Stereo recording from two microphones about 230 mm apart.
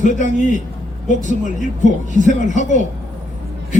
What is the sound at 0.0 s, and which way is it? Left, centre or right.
Speech, left.